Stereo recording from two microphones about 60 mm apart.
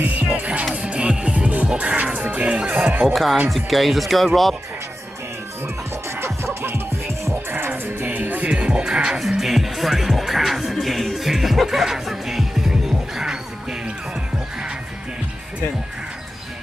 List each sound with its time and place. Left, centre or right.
0.4 s music: right
3.1 s speech: centre
6.2 s music: right
8.5 s music: centre
9.4 s music: centre